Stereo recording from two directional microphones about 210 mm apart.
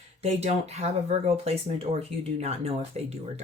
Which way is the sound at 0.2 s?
30° right (ahead or behind).